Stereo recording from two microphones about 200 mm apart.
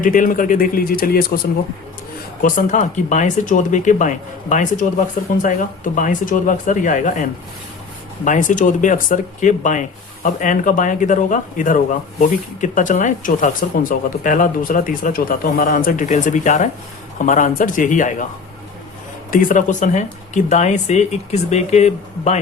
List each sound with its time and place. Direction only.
0.0 s speech: 45° left (ahead or behind)
2.4 s speech: 35° left (ahead or behind)
19.3 s speech: 40° left (ahead or behind)